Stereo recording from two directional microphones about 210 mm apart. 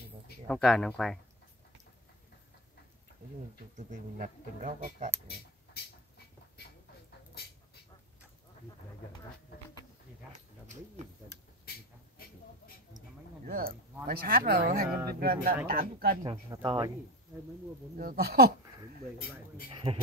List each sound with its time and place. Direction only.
0.5 s speech: centre (ahead or behind)
3.7 s speech: 35° right (ahead or behind)
5.8 s speech: 50° left (ahead or behind)
7.4 s bird: 50° left (ahead or behind)
13.5 s speech: 45° right (ahead or behind)
16.2 s speech: 20° right (ahead or behind)
17.9 s speech: 45° right (ahead or behind)
19.1 s speech: 45° left (ahead or behind)
19.7 s a man's voice: 25° right (ahead or behind)